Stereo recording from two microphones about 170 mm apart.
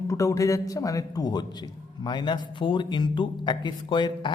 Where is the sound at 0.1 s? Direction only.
20° left (ahead or behind).